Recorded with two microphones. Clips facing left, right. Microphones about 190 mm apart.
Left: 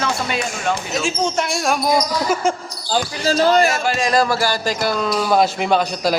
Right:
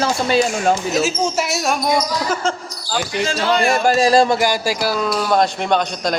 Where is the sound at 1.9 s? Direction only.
10° left (ahead or behind).